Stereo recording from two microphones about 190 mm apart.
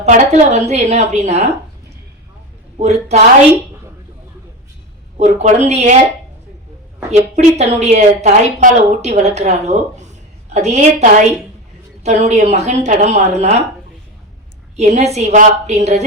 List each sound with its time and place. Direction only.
0.0 s a woman's voice: 35° right (ahead or behind)
2.7 s a woman's voice: 35° right (ahead or behind)
5.1 s a woman's voice: 35° right (ahead or behind)
7.1 s a woman's voice: 35° right (ahead or behind)
14.8 s a woman's voice: 35° right (ahead or behind)